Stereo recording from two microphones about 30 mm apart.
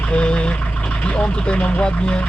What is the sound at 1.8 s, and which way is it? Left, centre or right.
Speech, left.